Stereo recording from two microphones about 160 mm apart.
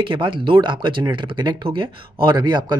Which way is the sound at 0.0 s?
30° right (ahead or behind).